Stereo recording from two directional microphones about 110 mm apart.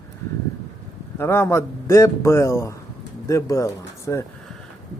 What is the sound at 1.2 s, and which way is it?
A man's voice, 25° left (ahead or behind).